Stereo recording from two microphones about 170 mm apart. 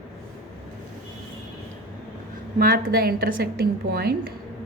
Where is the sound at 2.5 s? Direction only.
60° right (ahead or behind).